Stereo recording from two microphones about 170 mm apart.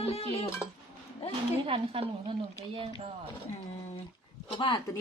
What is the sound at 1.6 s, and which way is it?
A woman's voice, 30° right (ahead or behind).